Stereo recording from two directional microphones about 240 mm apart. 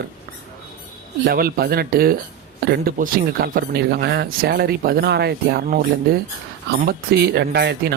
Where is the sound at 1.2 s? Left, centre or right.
Right.